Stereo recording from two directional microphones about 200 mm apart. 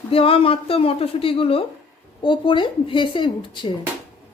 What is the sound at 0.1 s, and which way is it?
A woman's voice, 25° left (ahead or behind).